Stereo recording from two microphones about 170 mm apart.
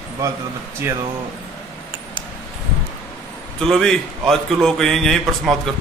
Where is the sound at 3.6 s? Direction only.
5° left (ahead or behind).